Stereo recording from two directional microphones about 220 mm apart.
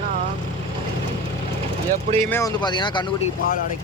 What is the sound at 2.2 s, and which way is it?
Speech, 10° left (ahead or behind).